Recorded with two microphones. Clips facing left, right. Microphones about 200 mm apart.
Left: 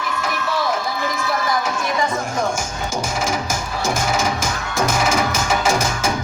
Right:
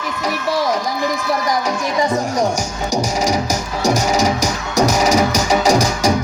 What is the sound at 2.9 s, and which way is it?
Music, 35° right (ahead or behind).